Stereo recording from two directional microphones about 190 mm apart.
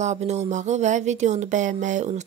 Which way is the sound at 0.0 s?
35° right (ahead or behind).